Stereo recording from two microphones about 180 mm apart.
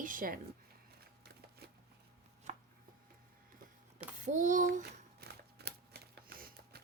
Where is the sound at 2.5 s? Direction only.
40° right (ahead or behind).